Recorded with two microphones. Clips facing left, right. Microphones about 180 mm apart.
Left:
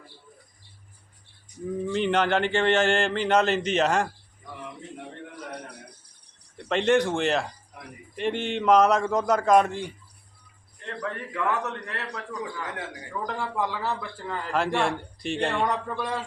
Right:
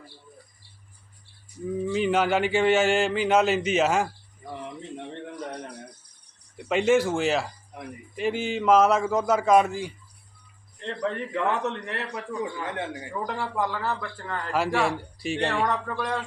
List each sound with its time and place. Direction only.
1.8 s speech: 5° right (ahead or behind)
6.6 s a man's voice: 5° right (ahead or behind)
10.8 s a man's voice: 25° right (ahead or behind)
13.2 s speech: 5° right (ahead or behind)
13.7 s a man's voice: 5° left (ahead or behind)
15.6 s speech: 5° left (ahead or behind)